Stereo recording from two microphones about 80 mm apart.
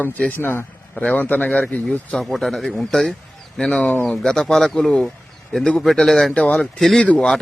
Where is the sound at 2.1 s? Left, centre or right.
Centre.